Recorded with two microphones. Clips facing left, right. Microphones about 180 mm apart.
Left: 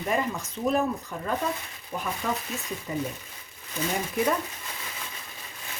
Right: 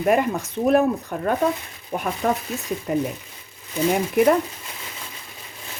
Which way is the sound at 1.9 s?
50° right (ahead or behind).